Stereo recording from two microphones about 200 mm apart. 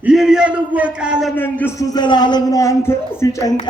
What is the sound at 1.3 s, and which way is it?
A man's voice, 10° left (ahead or behind).